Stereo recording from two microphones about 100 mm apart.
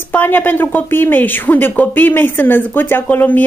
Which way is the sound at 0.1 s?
20° left (ahead or behind).